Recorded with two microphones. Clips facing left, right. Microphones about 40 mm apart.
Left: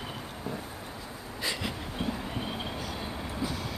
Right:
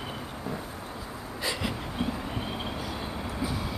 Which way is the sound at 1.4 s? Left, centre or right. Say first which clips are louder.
Right 2 dB; centre.